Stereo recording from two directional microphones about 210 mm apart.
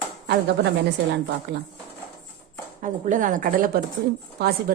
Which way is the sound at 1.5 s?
55° right (ahead or behind).